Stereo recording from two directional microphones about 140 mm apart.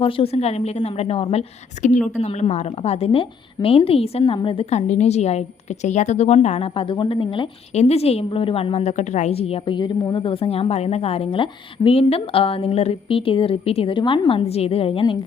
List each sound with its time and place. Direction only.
0.0 s a woman's voice: 45° left (ahead or behind)
4.9 s a woman's voice: 50° left (ahead or behind)
7.7 s a woman's voice: 50° left (ahead or behind)